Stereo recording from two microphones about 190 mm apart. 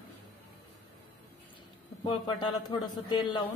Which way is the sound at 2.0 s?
25° left (ahead or behind).